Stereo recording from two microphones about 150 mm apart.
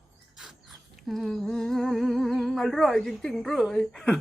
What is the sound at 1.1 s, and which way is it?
Speech, centre (ahead or behind).